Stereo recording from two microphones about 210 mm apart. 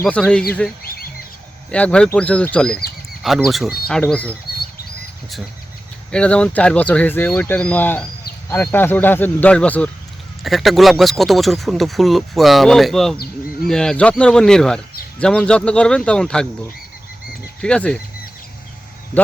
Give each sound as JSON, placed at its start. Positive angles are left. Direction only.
{"t": 0.0, "sound": "speech", "side_deg": 5}
{"t": 0.8, "sound": "bird", "side_deg": 45}
{"t": 1.7, "sound": "speech", "side_deg": 5}
{"t": 6.1, "sound": "speech", "side_deg": 5}
{"t": 17.6, "sound": "speech", "side_deg": 5}